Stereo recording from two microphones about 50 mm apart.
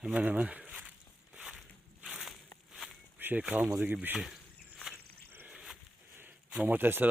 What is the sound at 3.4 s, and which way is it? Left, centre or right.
Speech, right.